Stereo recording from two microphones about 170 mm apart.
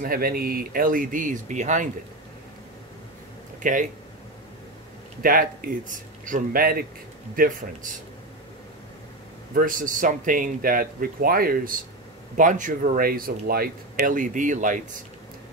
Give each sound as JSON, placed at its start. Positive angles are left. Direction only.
{"t": 0.0, "sound": "speech", "side_deg": -60}
{"t": 3.6, "sound": "speech", "side_deg": -50}
{"t": 5.2, "sound": "speech", "side_deg": -55}
{"t": 9.5, "sound": "speech", "side_deg": -55}